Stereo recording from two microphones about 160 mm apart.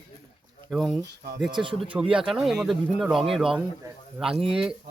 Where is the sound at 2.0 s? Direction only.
5° right (ahead or behind).